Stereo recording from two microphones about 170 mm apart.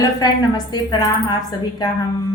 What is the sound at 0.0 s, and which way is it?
A woman's voice, 20° left (ahead or behind).